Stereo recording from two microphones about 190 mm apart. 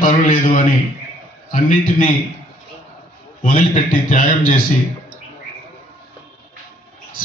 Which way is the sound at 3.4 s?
45° left (ahead or behind).